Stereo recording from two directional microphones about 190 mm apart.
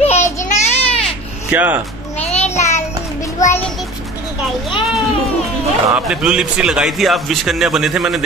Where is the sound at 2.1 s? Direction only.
35° left (ahead or behind).